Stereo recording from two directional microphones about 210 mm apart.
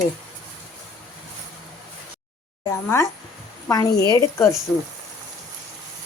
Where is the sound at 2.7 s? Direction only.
15° left (ahead or behind).